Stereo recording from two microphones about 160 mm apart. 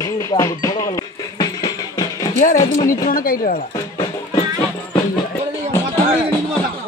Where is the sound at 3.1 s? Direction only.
65° left (ahead or behind).